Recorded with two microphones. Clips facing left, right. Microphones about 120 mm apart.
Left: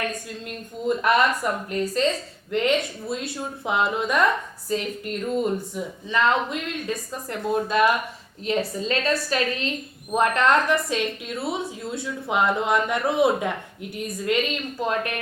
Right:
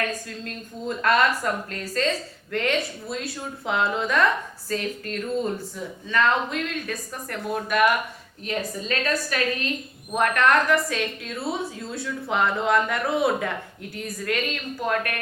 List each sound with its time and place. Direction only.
0.3 s speech: 15° left (ahead or behind)